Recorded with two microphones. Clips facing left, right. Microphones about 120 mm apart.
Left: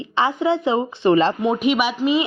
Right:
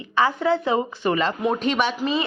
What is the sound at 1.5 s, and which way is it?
Speech, 10° left (ahead or behind).